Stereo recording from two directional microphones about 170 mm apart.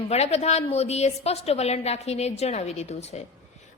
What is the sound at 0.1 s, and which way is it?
A woman's voice, 40° left (ahead or behind).